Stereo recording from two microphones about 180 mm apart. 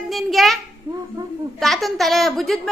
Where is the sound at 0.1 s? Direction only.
Centre (ahead or behind).